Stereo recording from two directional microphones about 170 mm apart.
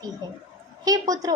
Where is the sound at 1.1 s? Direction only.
20° right (ahead or behind).